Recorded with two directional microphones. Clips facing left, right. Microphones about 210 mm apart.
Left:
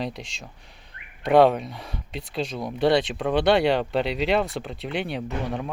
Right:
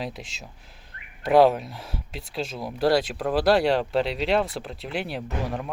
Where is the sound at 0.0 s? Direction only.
5° right (ahead or behind).